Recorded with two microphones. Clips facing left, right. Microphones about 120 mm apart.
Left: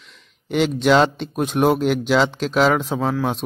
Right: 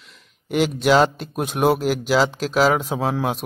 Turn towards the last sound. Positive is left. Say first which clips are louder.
# left 1 dB
turn(degrees=-5)  # may be behind; listen again after turning